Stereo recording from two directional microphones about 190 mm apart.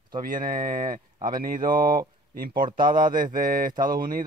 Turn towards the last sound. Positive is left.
turn(degrees=-50)  # may be behind; listen again after turning